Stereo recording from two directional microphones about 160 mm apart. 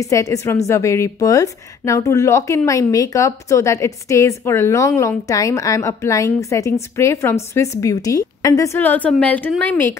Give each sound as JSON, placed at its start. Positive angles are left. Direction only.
{"t": 0.0, "sound": "a woman's voice", "side_deg": 20}